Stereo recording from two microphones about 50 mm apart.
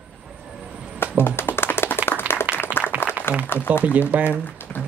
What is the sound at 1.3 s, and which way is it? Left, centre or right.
Music, left.